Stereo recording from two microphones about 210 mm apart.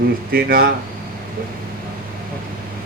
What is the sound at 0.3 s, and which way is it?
Speech, 50° right (ahead or behind).